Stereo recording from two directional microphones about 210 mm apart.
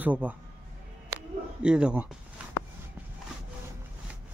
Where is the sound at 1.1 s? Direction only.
5° right (ahead or behind).